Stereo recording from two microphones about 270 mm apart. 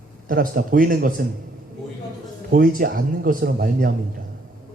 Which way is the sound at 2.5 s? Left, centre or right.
Right.